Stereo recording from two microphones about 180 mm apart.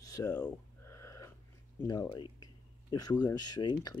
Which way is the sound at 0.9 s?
15° left (ahead or behind).